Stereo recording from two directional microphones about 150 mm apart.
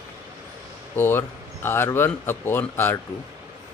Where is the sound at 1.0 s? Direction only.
15° left (ahead or behind).